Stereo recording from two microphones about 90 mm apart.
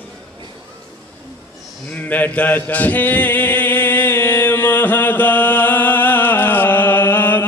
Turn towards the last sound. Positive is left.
turn(degrees=20)  # may be behind; listen again after turning